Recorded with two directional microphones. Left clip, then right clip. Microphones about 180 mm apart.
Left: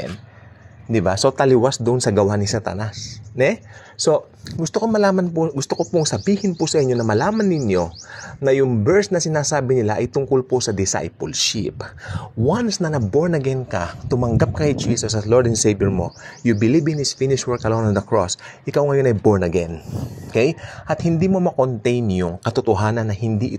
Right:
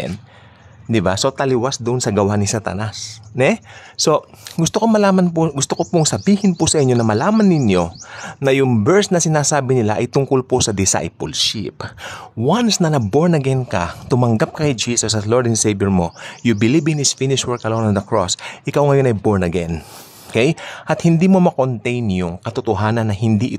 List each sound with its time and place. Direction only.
0.9 s speech: 15° right (ahead or behind)
11.3 s speech: 5° right (ahead or behind)
12.1 s speech: 20° right (ahead or behind)
21.5 s speech: 5° right (ahead or behind)